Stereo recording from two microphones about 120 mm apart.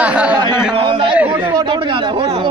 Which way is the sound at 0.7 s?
45° right (ahead or behind).